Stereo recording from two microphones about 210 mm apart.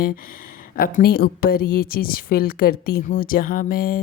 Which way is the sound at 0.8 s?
45° left (ahead or behind).